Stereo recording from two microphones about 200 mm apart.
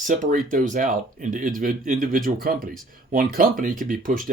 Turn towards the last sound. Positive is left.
turn(degrees=-45)  # may be behind; listen again after turning